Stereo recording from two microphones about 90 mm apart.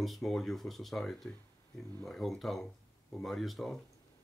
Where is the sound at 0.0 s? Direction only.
Centre (ahead or behind).